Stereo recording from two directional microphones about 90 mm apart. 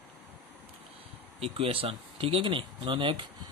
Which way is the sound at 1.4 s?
90° right.